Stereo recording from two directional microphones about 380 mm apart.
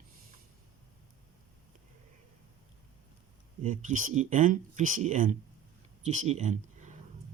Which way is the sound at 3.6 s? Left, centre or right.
Centre.